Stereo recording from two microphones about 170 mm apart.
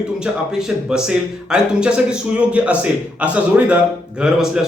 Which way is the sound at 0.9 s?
5° right (ahead or behind).